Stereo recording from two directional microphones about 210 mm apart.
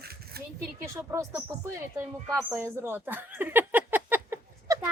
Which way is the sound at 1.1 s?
15° right (ahead or behind).